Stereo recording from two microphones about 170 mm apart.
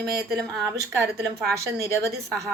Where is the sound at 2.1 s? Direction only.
Centre (ahead or behind).